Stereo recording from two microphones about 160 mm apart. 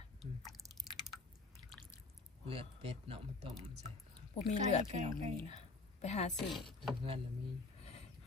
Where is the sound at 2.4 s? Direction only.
35° right (ahead or behind).